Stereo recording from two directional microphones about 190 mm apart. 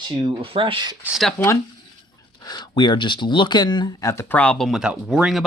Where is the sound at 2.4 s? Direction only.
20° left (ahead or behind); by 5.4 s 5° right (ahead or behind).